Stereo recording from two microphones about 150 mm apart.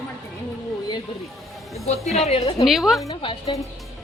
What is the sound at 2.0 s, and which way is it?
Speech, centre (ahead or behind).